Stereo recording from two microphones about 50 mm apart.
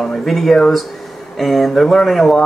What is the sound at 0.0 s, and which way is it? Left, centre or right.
Speech, centre.